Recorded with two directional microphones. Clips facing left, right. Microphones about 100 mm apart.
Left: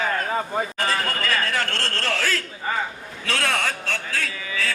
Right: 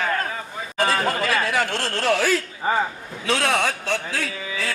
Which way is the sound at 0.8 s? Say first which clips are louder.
Right 4 dB; 15° right (ahead or behind).